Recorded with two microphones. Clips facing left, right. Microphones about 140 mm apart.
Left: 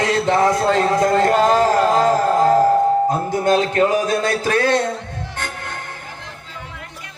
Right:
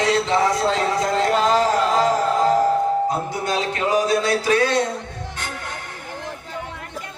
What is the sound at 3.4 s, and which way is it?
Speech, 50° left (ahead or behind).